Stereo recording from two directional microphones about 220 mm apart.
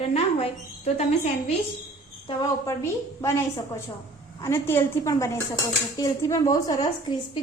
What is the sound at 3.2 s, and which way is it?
A woman's voice, 10° left (ahead or behind).